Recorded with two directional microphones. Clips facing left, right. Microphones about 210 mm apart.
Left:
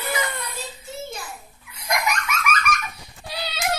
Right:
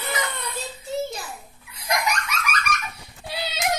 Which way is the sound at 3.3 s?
25° right (ahead or behind).